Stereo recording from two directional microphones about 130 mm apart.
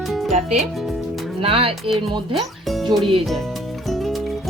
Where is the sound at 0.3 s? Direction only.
65° right (ahead or behind).